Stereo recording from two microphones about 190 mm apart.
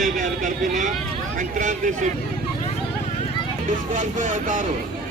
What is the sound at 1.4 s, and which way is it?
Speech, 45° right (ahead or behind).